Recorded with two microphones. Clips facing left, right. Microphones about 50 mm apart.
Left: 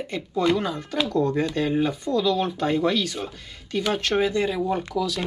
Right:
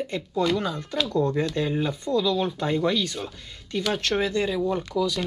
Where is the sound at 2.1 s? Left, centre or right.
Left.